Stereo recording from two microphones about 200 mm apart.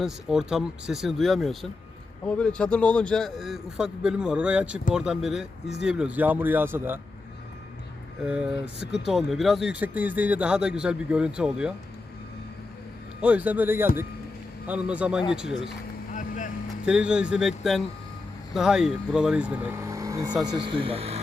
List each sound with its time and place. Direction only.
0.0 s a man's voice: 5° right (ahead or behind)
8.2 s a man's voice: 5° right (ahead or behind)
13.2 s a man's voice: 5° right (ahead or behind)
16.1 s speech: 40° left (ahead or behind)
16.8 s a man's voice: 5° right (ahead or behind); by 21.2 s 30° right (ahead or behind)